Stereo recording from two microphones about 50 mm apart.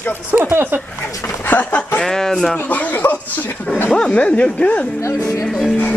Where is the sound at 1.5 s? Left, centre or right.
Left.